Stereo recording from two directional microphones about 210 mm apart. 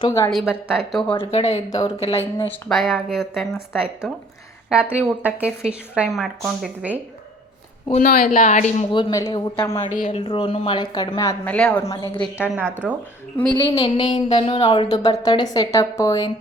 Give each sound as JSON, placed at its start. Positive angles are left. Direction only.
{"t": 0.0, "sound": "a woman's voice", "side_deg": 15}
{"t": 0.3, "sound": "a woman's voice", "side_deg": 0}
{"t": 1.2, "sound": "speech", "side_deg": 30}
{"t": 2.4, "sound": "a woman's voice", "side_deg": 5}
{"t": 4.7, "sound": "a woman's voice", "side_deg": -5}
{"t": 7.9, "sound": "speech", "side_deg": 35}
{"t": 8.9, "sound": "speech", "side_deg": 20}
{"t": 12.2, "sound": "a woman's voice", "side_deg": -5}
{"t": 13.6, "sound": "speech", "side_deg": 20}